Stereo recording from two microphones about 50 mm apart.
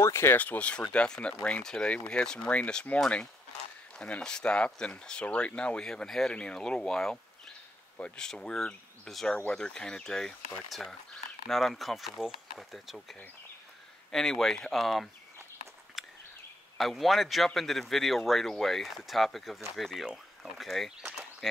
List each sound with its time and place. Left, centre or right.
0.0 s speech: left
0.4 s speech: left
3.9 s a sound: left
4.2 s speech: centre
5.8 s speech: centre
8.2 s speech: centre
16.0 s a sound: centre
16.7 s speech: centre